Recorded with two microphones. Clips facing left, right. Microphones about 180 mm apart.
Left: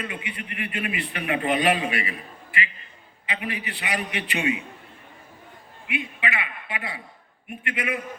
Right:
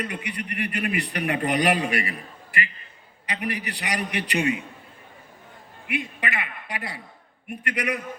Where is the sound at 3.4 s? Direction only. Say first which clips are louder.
Right 3 dB; 40° right (ahead or behind).